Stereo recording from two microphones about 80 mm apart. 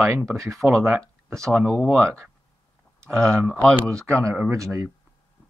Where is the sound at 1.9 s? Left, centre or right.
Right.